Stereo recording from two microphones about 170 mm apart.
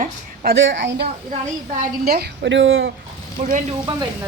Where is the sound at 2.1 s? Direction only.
70° right (ahead or behind); by 2.9 s 90° right.